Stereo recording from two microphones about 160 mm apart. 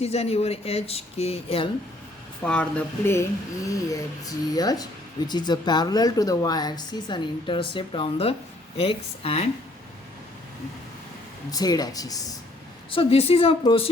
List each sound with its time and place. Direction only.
0.0 s speech: 40° left (ahead or behind)
2.4 s speech: 5° left (ahead or behind); by 9.5 s 40° left (ahead or behind)
11.5 s speech: 25° left (ahead or behind)
12.9 s speech: 35° left (ahead or behind)